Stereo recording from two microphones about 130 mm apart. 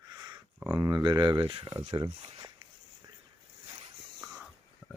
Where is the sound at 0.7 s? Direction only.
30° right (ahead or behind).